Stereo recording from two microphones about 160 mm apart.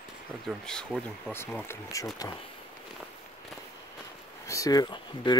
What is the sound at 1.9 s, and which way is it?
Speech, 20° left (ahead or behind).